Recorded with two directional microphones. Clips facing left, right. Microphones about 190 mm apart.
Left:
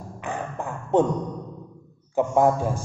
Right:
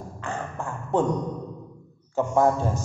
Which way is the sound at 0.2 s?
15° left (ahead or behind).